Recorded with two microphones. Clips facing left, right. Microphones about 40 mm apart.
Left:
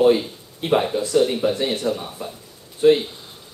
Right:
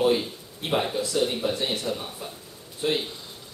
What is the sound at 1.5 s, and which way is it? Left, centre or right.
Speech, left.